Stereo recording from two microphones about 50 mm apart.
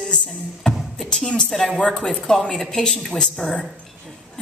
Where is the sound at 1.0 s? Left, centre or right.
Centre.